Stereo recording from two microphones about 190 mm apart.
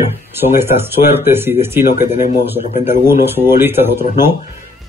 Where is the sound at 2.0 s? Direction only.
40° left (ahead or behind).